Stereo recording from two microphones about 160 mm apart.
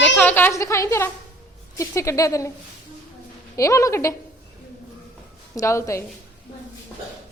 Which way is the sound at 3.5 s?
20° left (ahead or behind).